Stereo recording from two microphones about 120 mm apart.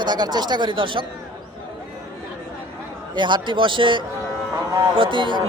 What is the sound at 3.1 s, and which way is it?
A man's voice, 40° right (ahead or behind).